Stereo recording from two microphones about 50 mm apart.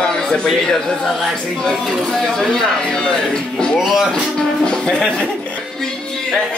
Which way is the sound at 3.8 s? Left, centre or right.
Centre.